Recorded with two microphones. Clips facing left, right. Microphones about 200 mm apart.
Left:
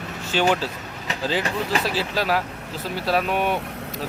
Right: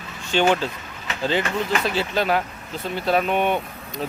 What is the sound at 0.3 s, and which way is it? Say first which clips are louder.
Speech: right 2 dB; 5° left (ahead or behind).